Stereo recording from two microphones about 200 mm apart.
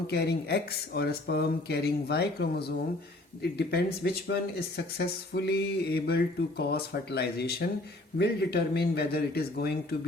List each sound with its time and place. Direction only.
0.1 s speech: 55° left (ahead or behind)